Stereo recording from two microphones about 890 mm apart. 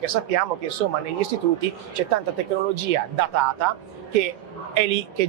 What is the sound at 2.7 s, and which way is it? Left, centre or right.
Speech, right.